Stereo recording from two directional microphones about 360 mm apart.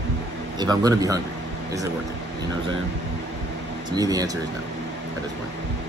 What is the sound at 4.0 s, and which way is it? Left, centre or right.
Speech, centre.